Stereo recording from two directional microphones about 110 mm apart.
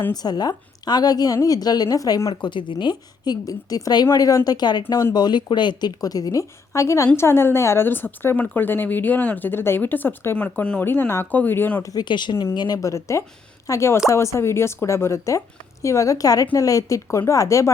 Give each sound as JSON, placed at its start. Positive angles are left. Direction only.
{"t": 0.1, "sound": "a woman's voice", "side_deg": 40}
{"t": 2.3, "sound": "a woman's voice", "side_deg": 45}
{"t": 11.9, "sound": "a woman's voice", "side_deg": 40}